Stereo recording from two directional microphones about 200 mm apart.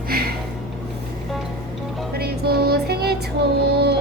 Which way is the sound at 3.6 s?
55° right (ahead or behind).